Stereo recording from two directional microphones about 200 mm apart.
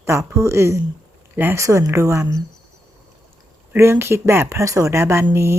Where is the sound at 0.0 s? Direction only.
15° right (ahead or behind).